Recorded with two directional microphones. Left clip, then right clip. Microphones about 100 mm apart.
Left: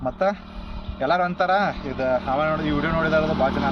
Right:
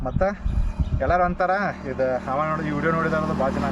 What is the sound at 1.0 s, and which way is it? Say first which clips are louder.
Speech: even; 30° right (ahead or behind).